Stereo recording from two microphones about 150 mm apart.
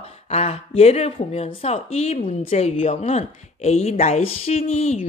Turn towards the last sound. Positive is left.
turn(degrees=45)  # may be behind; listen again after turning